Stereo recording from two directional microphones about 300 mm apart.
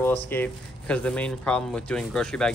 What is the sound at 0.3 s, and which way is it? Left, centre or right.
Speech, centre.